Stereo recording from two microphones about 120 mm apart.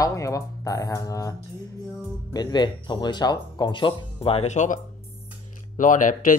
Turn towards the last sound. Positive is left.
turn(degrees=90)